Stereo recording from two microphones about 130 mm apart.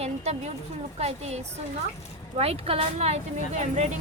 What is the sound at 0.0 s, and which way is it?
A woman's voice, 55° right (ahead or behind).